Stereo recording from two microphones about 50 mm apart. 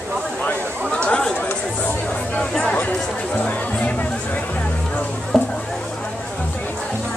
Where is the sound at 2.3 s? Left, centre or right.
Left.